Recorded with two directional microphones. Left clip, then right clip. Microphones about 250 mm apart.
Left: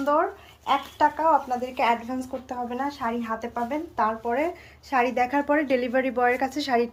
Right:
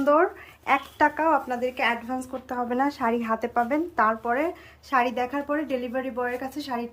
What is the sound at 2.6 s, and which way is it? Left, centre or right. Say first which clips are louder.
Speech: right 5 dB; right.